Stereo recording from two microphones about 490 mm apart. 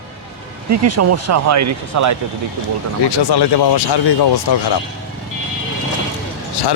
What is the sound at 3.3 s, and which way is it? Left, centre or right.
Speech, left.